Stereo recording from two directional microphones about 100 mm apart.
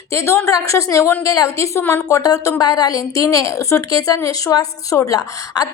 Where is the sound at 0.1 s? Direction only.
30° left (ahead or behind).